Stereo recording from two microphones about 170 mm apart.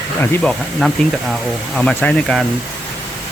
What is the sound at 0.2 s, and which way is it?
Speech, 5° left (ahead or behind).